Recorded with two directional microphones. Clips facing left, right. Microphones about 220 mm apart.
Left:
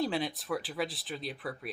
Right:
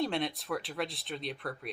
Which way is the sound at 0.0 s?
Centre (ahead or behind).